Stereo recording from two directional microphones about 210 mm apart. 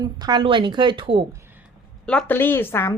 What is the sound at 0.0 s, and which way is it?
A woman's voice, 20° right (ahead or behind).